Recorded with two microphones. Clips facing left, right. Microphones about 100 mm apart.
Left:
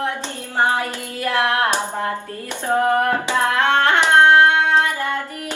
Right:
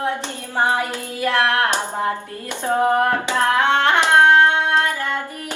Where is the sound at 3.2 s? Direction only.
15° left (ahead or behind).